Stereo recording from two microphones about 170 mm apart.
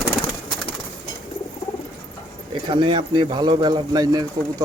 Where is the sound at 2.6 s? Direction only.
25° right (ahead or behind).